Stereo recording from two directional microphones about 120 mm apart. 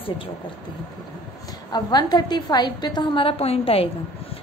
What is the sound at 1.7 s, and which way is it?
A woman's voice, 35° left (ahead or behind).